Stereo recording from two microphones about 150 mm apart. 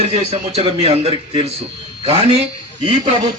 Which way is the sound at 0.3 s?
45° right (ahead or behind).